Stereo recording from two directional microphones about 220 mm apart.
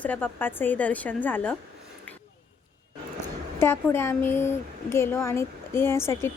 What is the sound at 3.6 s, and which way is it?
Speech, 10° left (ahead or behind).